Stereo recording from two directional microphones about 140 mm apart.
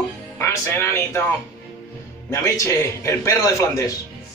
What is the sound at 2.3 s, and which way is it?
A man's voice, 20° left (ahead or behind).